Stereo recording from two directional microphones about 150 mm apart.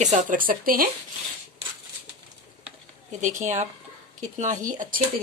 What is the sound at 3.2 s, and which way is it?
Speech, 55° right (ahead or behind).